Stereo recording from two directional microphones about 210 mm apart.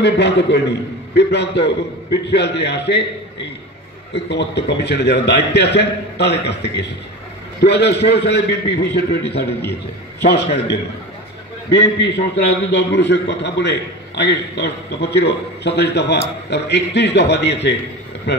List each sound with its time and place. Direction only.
0.0 s a man's voice: 55° left (ahead or behind)
4.1 s a man's voice: 55° left (ahead or behind)